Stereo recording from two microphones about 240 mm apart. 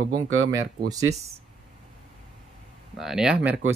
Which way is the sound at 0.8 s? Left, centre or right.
Centre.